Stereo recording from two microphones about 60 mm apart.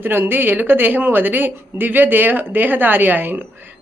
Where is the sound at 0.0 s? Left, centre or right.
Right.